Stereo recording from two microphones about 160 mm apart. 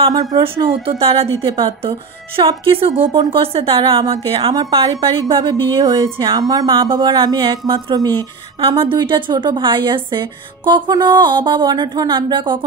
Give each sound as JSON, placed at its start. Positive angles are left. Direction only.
{"t": 0.1, "sound": "a woman's voice", "side_deg": -25}
{"t": 0.4, "sound": "speech", "side_deg": -35}
{"t": 4.0, "sound": "a woman's voice", "side_deg": -25}